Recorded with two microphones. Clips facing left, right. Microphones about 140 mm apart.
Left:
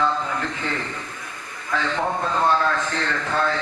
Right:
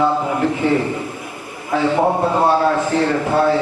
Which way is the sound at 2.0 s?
35° right (ahead or behind).